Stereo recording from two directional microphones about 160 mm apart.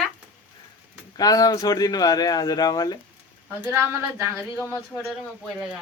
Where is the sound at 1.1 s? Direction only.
25° left (ahead or behind).